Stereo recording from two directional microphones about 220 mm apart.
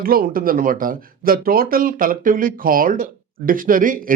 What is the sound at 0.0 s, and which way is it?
Speech, 40° right (ahead or behind).